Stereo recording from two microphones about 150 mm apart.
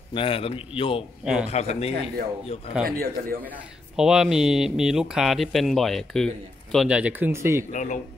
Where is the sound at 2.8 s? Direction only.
85° right.